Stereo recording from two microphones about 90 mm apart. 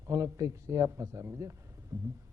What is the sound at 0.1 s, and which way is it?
A man's voice, 40° right (ahead or behind).